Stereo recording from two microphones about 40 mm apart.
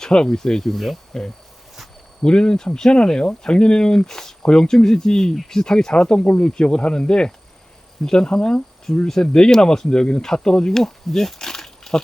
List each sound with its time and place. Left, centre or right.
0.0 s speech: centre